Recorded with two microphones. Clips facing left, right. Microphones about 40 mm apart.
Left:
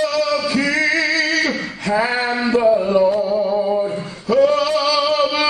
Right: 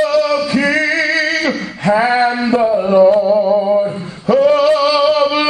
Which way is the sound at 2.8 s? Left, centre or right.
Right.